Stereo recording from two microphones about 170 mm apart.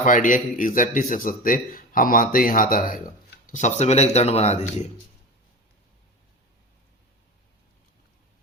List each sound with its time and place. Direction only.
0.0 s speech: 50° left (ahead or behind)